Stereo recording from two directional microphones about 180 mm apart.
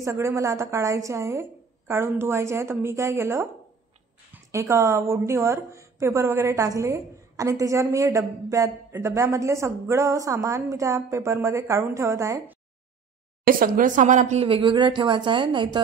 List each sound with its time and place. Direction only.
0.0 s a woman's voice: 15° right (ahead or behind)
13.5 s speech: 50° right (ahead or behind); by 15.8 s 25° right (ahead or behind)